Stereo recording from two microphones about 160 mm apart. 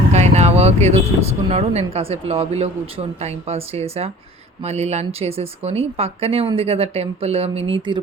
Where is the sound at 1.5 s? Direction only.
40° right (ahead or behind).